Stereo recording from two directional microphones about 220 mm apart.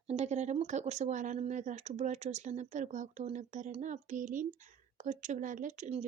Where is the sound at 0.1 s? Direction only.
30° right (ahead or behind).